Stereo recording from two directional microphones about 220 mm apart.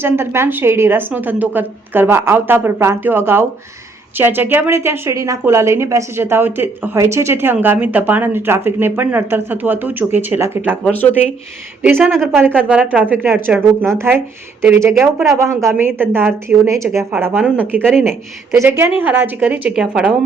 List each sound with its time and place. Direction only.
0.0 s a woman's voice: 10° right (ahead or behind)
18.1 s a woman's voice: 10° right (ahead or behind)